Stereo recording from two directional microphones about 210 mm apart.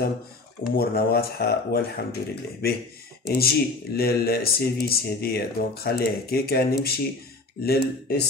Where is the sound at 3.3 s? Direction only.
50° left (ahead or behind).